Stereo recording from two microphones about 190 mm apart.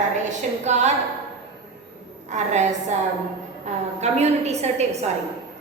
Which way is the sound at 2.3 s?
40° right (ahead or behind).